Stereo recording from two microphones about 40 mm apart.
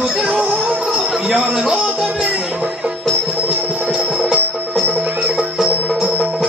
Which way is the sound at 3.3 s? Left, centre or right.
Right.